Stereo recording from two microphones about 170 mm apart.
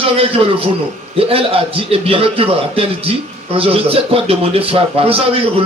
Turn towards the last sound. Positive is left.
turn(degrees=-35)  # may be behind; listen again after turning